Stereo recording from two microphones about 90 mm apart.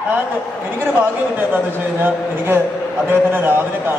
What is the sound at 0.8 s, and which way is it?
A man's voice, 20° right (ahead or behind).